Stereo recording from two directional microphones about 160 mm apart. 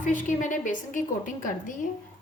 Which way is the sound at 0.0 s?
50° left (ahead or behind).